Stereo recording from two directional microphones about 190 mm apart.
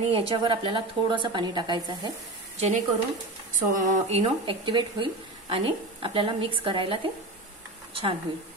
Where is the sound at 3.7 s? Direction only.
40° right (ahead or behind).